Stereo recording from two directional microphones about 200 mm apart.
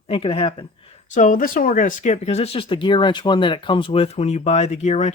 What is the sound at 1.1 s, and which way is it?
Speech, 40° left (ahead or behind).